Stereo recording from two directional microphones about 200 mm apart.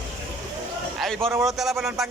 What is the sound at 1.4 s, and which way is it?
Speech, centre (ahead or behind).